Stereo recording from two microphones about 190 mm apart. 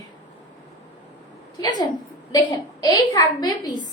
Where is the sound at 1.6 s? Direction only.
20° left (ahead or behind).